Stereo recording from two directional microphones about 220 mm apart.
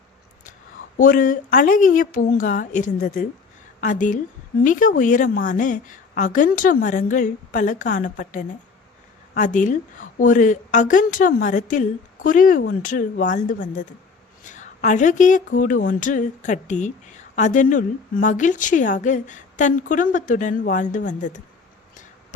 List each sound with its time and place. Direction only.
0.9 s a woman's voice: 40° left (ahead or behind)